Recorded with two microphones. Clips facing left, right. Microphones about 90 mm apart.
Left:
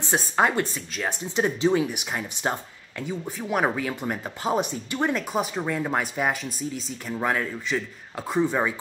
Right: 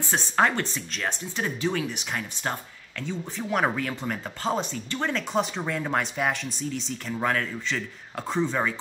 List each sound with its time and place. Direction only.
0.4 s speech: 15° left (ahead or behind)
1.2 s speech: 20° left (ahead or behind)